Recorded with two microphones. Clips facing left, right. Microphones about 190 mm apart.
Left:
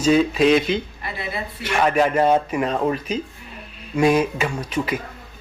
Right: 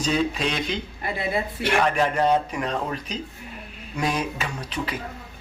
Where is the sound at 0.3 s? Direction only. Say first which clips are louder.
Left 10 dB; 5° left (ahead or behind).